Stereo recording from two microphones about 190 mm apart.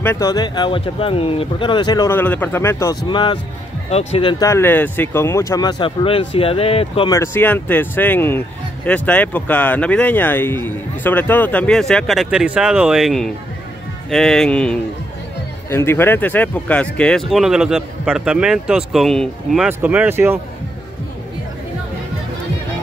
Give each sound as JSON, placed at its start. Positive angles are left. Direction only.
{"t": 0.0, "sound": "speech", "side_deg": 15}
{"t": 3.1, "sound": "speech", "side_deg": 25}
{"t": 4.5, "sound": "speech", "side_deg": 10}
{"t": 7.1, "sound": "speech", "side_deg": 15}